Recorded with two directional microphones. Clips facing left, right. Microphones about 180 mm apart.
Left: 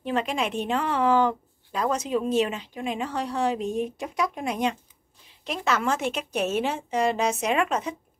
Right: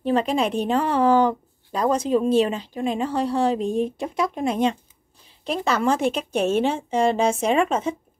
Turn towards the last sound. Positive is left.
turn(degrees=-25)  # may be behind; listen again after turning